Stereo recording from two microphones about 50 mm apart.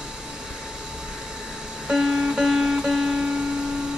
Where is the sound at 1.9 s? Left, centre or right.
Centre.